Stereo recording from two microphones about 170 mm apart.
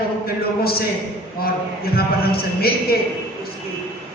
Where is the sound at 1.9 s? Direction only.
65° left (ahead or behind).